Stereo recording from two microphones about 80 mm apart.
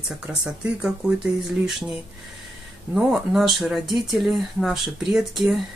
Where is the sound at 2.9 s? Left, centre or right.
Centre.